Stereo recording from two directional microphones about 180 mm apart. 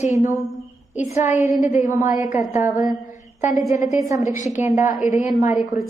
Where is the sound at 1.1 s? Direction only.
45° left (ahead or behind).